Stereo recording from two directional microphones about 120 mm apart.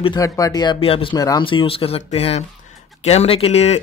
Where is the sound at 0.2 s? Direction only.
30° left (ahead or behind).